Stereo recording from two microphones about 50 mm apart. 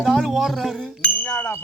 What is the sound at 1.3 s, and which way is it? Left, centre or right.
Speech, left.